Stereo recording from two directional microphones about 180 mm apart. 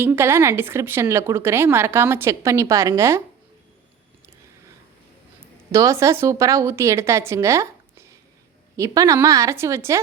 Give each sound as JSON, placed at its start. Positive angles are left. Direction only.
{"t": 0.0, "sound": "speech", "side_deg": -15}
{"t": 5.7, "sound": "speech", "side_deg": -15}